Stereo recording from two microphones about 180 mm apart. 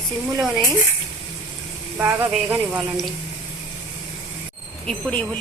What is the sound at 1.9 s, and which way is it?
Speech, 10° right (ahead or behind).